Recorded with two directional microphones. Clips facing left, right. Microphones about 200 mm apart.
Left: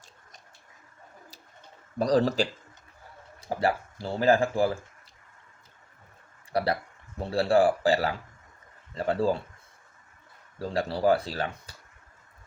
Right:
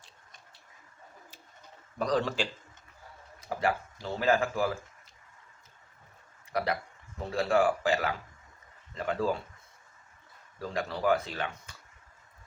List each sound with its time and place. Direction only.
2.0 s speech: 35° left (ahead or behind)
6.5 s speech: 35° left (ahead or behind)
10.6 s speech: 30° left (ahead or behind)